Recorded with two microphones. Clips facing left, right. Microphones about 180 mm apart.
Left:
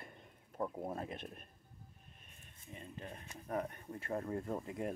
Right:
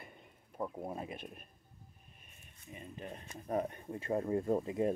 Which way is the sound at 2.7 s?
15° right (ahead or behind).